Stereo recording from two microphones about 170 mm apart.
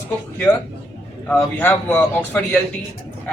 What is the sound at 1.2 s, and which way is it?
A man's voice, 10° left (ahead or behind).